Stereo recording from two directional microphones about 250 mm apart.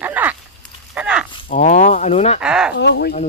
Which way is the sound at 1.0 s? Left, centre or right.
Centre.